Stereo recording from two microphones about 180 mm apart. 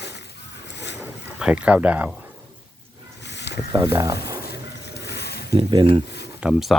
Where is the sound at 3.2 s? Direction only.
70° left (ahead or behind).